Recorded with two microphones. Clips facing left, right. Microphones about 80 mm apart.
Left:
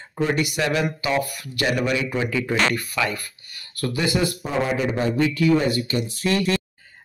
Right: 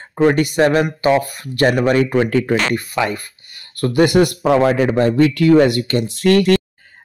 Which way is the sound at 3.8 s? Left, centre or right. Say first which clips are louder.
Right 10 dB; right.